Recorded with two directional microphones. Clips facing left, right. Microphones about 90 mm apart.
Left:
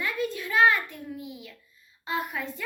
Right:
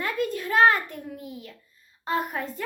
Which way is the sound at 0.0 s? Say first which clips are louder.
Right 3 dB; 45° right (ahead or behind).